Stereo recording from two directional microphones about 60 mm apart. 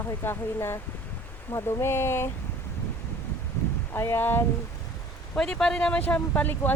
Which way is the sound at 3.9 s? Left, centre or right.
Left.